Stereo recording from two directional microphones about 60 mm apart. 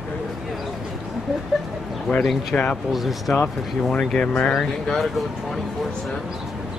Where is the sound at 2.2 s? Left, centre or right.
Centre.